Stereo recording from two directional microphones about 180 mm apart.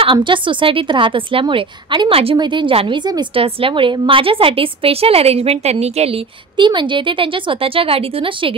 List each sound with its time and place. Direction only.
0.0 s speech: 30° right (ahead or behind)